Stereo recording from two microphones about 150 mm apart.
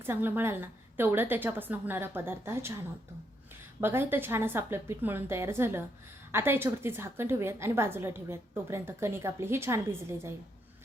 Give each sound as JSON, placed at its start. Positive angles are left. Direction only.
{"t": 0.0, "sound": "a woman's voice", "side_deg": -15}
{"t": 3.8, "sound": "a woman's voice", "side_deg": -15}